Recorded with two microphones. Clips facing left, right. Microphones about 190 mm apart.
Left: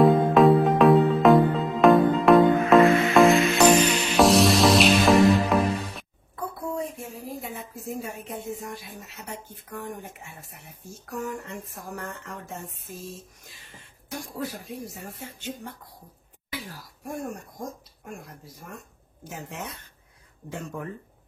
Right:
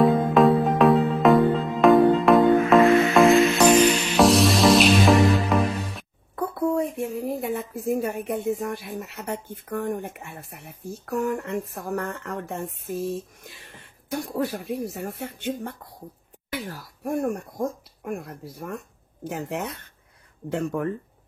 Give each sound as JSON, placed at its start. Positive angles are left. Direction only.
{"t": 0.0, "sound": "music", "side_deg": 0}
{"t": 6.3, "sound": "a woman's voice", "side_deg": -55}